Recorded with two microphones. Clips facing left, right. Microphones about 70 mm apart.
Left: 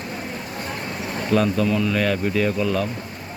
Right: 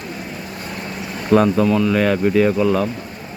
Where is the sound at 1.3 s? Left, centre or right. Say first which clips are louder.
Right 6 dB; right.